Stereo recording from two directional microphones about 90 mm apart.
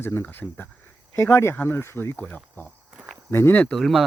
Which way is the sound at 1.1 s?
30° left (ahead or behind).